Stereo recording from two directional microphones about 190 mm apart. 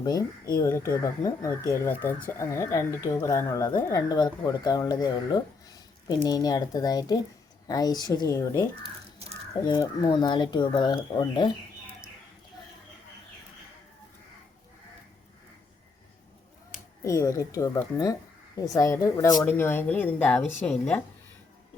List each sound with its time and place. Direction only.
0.0 s speech: 20° left (ahead or behind)
17.0 s speech: 15° left (ahead or behind)